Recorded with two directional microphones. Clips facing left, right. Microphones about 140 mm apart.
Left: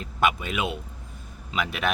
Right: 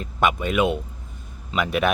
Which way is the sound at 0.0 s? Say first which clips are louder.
Right 2 dB; centre (ahead or behind).